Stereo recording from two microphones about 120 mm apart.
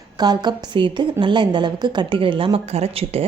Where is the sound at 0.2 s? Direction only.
35° right (ahead or behind).